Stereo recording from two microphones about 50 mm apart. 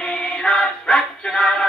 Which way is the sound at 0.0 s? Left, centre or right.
Centre.